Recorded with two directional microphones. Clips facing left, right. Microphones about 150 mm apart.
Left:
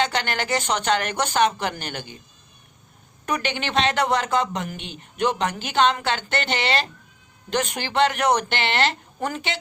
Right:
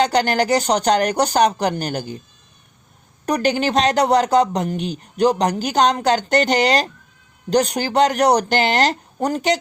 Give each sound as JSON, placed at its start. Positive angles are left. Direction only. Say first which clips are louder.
{"t": 0.0, "sound": "speech", "louder": "right 7 dB", "side_deg": -40}
{"t": 3.2, "sound": "speech", "louder": "right 8 dB", "side_deg": -40}